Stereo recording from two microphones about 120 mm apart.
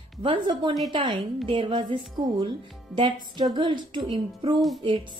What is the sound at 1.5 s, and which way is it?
A woman's voice, 45° right (ahead or behind).